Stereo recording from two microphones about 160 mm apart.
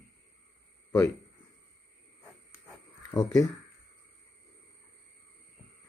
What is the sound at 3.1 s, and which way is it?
Speech, 20° left (ahead or behind).